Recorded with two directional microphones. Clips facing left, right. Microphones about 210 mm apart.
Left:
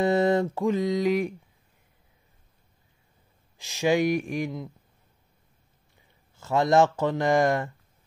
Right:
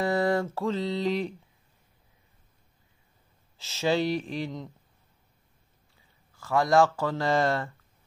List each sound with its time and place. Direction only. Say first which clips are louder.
0.0 s mantra: left 4 dB; 20° left (ahead or behind)
3.5 s speech: left 3 dB; 15° left (ahead or behind)
6.3 s speech: left 1 dB; 25° left (ahead or behind)